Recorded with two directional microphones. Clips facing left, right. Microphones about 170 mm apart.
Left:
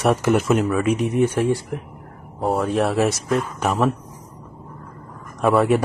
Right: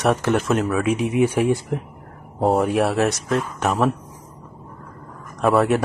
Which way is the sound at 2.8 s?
Centre (ahead or behind).